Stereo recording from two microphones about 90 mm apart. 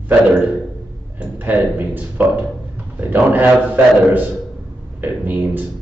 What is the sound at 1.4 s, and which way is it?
Speech, 20° right (ahead or behind).